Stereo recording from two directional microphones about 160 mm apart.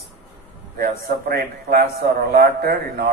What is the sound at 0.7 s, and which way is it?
A man's voice, 65° right (ahead or behind).